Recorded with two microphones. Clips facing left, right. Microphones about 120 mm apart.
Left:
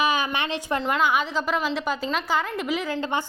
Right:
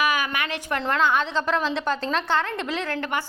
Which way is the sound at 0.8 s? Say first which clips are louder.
Right 1 dB; 10° left (ahead or behind).